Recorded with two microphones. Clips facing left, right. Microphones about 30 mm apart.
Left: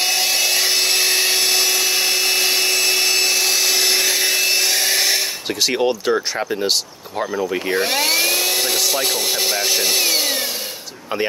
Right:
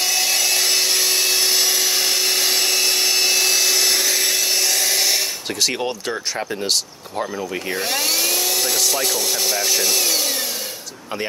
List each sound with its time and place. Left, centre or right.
0.0 s wood: centre
1.4 s a sound: centre
5.5 s speech: centre